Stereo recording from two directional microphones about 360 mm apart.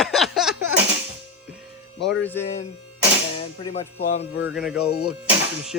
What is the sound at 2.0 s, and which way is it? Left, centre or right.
Speech, centre.